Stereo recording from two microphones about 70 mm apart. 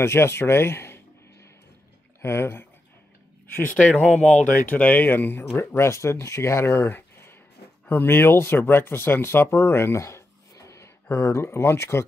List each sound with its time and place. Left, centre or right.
0.0 s speech: left
2.2 s speech: left
4.0 s speech: centre; by 12.1 s left